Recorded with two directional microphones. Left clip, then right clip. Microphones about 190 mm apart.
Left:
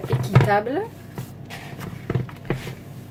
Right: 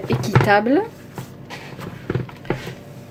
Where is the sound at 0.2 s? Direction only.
40° right (ahead or behind).